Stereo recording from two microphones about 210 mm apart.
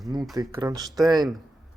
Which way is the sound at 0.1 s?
20° right (ahead or behind).